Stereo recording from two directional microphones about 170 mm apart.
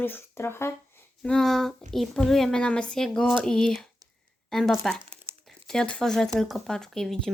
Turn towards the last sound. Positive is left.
turn(degrees=0)  # may be behind; listen again after turning